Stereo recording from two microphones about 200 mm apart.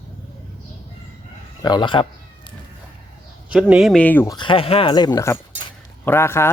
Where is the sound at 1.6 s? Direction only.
20° left (ahead or behind).